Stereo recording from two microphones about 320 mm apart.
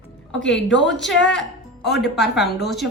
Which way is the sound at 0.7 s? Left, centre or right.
Left.